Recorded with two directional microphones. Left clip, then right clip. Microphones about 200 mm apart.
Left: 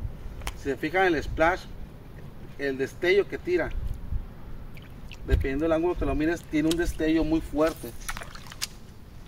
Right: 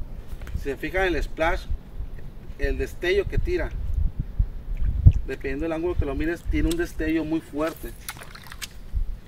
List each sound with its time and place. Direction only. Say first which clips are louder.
0.7 s speech: left 1 dB; 30° left (ahead or behind)
2.7 s speech: left 1 dB; 35° left (ahead or behind)
5.3 s speech: left 4 dB; 40° left (ahead or behind)
8.1 s a sound: left 2 dB; 25° right (ahead or behind)